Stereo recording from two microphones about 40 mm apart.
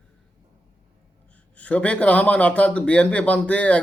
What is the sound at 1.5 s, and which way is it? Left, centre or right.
A man's voice, left.